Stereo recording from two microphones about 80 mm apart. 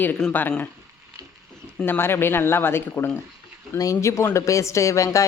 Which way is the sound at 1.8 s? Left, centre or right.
Left.